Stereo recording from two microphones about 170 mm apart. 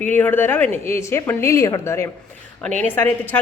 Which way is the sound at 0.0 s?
10° left (ahead or behind).